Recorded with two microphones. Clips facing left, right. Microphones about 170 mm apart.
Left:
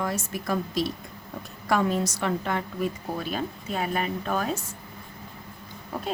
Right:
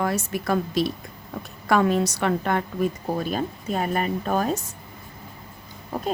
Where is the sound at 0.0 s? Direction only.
70° right (ahead or behind); by 4.5 s 40° right (ahead or behind).